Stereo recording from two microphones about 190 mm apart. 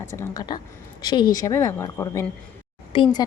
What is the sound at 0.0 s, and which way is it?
A woman's voice, 15° left (ahead or behind).